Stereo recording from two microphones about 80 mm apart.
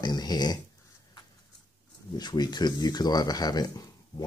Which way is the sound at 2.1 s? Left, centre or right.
Left.